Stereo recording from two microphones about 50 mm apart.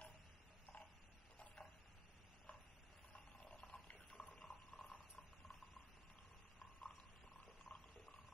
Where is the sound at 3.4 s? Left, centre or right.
Left.